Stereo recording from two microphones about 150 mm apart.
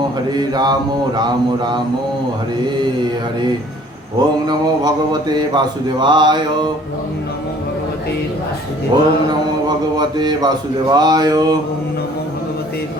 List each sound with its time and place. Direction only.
0.3 s mantra: 25° right (ahead or behind)
4.4 s mantra: 30° right (ahead or behind)
8.9 s mantra: 25° right (ahead or behind)